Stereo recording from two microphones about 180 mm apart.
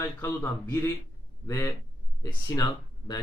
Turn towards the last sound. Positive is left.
turn(degrees=20)  # may be behind; listen again after turning